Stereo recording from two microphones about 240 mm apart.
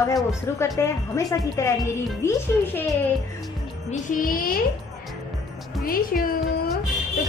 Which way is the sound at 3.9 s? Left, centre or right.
Left.